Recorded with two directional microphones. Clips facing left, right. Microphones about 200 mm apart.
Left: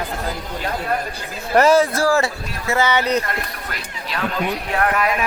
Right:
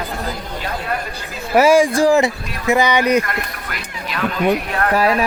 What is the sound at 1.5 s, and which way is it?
Speech, 10° right (ahead or behind).